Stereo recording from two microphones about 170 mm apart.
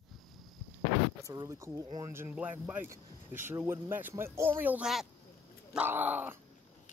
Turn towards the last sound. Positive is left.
turn(degrees=-10)  # may be behind; listen again after turning